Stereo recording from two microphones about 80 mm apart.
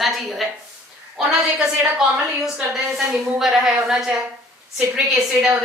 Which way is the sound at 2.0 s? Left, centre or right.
Centre.